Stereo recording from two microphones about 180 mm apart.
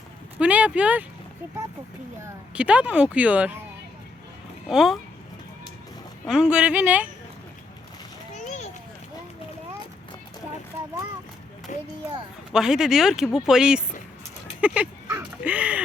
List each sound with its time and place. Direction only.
0.3 s speech: 5° right (ahead or behind)
2.2 s speech: 5° right (ahead or behind)
4.7 s speech: centre (ahead or behind)
6.2 s speech: 5° right (ahead or behind)
8.4 s a sound: 40° left (ahead or behind)
11.7 s a child's voice: 45° left (ahead or behind)
12.5 s speech: 5° right (ahead or behind)
14.6 s a sound: 5° right (ahead or behind)